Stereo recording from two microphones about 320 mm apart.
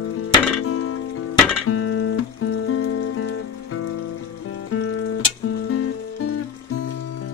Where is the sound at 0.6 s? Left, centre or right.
Left.